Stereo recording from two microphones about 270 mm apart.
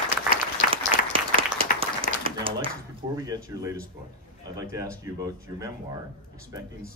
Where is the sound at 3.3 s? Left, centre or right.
Centre.